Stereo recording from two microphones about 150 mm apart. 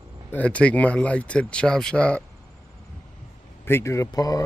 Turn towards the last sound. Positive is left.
turn(degrees=25)  # may be behind; listen again after turning